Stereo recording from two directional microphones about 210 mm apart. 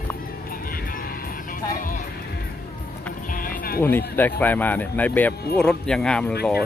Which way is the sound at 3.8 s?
10° left (ahead or behind).